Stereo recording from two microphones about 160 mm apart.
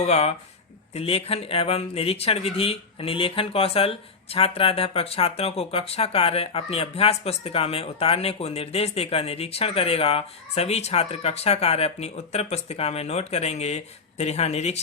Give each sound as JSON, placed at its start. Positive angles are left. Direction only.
{"t": 0.0, "sound": "speech", "side_deg": 40}